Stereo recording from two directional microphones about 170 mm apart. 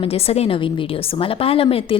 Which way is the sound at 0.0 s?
35° left (ahead or behind).